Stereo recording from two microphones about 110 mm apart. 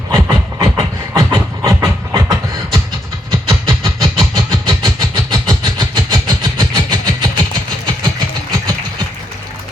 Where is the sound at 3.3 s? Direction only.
40° right (ahead or behind).